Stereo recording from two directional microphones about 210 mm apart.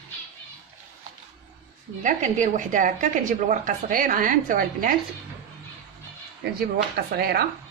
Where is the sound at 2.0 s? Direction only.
35° right (ahead or behind).